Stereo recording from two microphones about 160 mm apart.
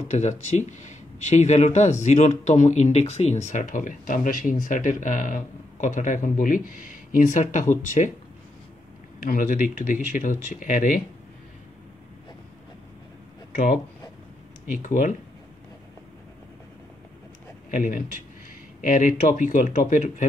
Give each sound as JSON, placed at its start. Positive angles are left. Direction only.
{"t": 0.1, "sound": "speech", "side_deg": 45}
{"t": 9.2, "sound": "speech", "side_deg": 55}
{"t": 14.7, "sound": "speech", "side_deg": 55}
{"t": 17.7, "sound": "speech", "side_deg": 55}